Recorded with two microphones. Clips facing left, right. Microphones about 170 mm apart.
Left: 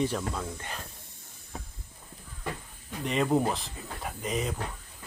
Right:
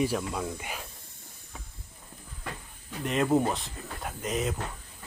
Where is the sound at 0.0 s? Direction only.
10° right (ahead or behind).